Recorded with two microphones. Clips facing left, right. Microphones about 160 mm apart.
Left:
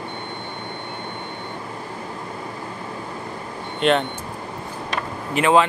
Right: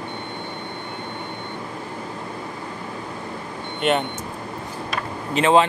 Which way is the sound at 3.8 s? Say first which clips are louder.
Left 2 dB; 5° right (ahead or behind).